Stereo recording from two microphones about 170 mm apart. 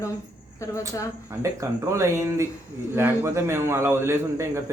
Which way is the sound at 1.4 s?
15° right (ahead or behind).